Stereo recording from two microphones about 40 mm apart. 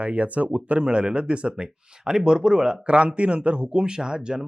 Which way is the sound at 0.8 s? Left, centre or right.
Right.